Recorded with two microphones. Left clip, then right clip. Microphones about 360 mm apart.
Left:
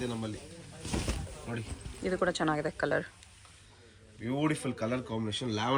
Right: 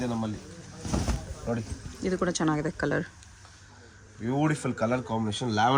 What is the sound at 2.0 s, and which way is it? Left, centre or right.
Speech, centre.